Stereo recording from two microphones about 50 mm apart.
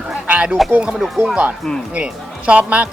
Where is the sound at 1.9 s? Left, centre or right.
Right.